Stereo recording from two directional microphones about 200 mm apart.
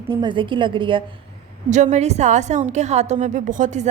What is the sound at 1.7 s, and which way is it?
A woman's voice, 35° right (ahead or behind).